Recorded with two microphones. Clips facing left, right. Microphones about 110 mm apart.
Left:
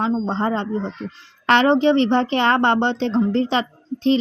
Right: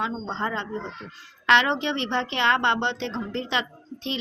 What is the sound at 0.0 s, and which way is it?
Speech, 40° left (ahead or behind).